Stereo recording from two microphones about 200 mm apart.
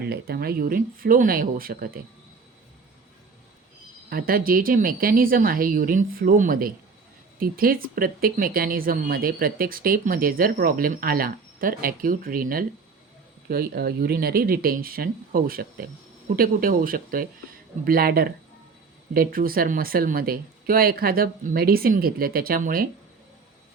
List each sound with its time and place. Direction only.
0.0 s speech: 50° right (ahead or behind)
4.1 s speech: 45° right (ahead or behind)